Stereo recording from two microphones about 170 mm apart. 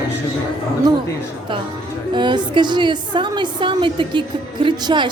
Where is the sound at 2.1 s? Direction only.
25° right (ahead or behind).